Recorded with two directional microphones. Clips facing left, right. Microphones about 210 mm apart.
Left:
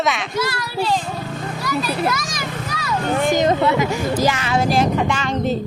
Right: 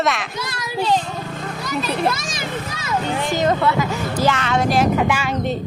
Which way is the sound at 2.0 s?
25° right (ahead or behind).